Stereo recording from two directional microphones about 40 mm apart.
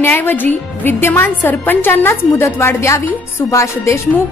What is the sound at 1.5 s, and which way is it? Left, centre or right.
A woman's voice, left.